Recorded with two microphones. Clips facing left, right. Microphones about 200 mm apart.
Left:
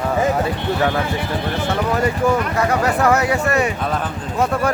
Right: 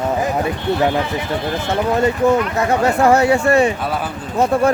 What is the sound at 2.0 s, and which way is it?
Speech, 25° right (ahead or behind).